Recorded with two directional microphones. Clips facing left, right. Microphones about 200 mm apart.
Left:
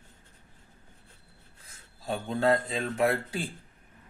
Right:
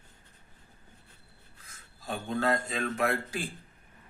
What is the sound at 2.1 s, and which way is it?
Speech, 30° left (ahead or behind).